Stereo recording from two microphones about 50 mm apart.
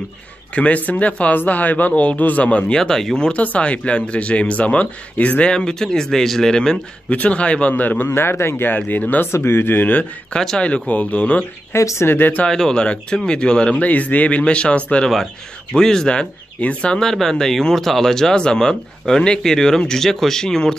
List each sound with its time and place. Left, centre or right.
0.6 s a man's voice: left
2.7 s speech: centre
3.3 s speech: left
7.1 s speech: left
7.7 s a man's voice: left
8.1 s speech: left
8.7 s a man's voice: left
9.3 s speech: left
11.7 s speech: left
12.1 s a man's voice: left
12.4 s speech: centre
15.7 s speech: centre
17.0 s speech: centre